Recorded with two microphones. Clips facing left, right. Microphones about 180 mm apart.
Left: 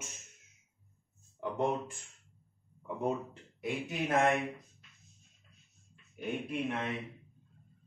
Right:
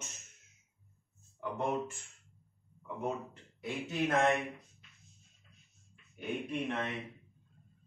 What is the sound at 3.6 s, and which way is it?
Speech, 10° left (ahead or behind).